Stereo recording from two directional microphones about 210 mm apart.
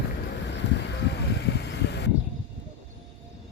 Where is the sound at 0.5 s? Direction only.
55° left (ahead or behind).